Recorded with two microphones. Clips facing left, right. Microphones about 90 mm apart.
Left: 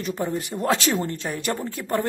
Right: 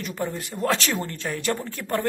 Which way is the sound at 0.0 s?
20° left (ahead or behind).